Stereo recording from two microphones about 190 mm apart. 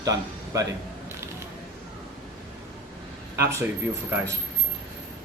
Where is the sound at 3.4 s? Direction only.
15° right (ahead or behind).